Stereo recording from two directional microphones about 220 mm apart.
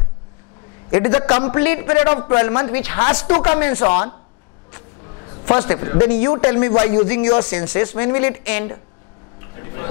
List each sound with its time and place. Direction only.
0.9 s a man's voice: 20° left (ahead or behind)
9.6 s tick-tock: 20° left (ahead or behind)